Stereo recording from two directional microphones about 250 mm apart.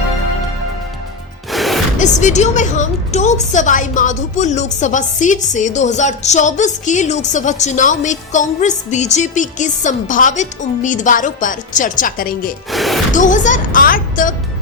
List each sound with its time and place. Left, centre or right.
1.5 s music: centre
2.0 s a woman's voice: left
12.7 s speech: centre
13.1 s a woman's voice: left